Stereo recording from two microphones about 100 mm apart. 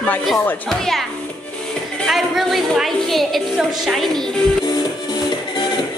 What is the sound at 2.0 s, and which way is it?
A woman's voice, centre (ahead or behind).